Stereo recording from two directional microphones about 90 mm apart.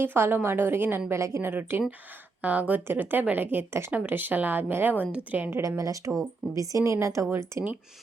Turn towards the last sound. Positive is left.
turn(degrees=-30)  # may be behind; listen again after turning